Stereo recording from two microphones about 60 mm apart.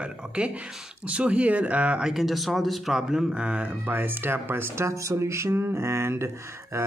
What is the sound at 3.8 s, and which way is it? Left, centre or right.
Speech, right.